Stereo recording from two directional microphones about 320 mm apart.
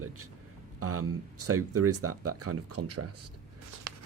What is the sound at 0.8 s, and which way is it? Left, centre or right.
Speech, right.